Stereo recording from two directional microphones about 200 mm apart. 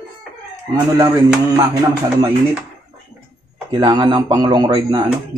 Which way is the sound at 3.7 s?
20° right (ahead or behind).